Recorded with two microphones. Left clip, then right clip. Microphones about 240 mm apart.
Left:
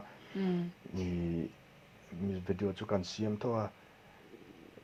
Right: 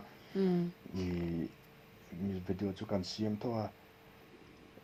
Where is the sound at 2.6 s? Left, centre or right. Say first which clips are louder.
Left 4 dB; left.